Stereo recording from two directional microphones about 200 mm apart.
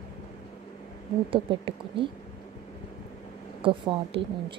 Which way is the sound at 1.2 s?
25° right (ahead or behind).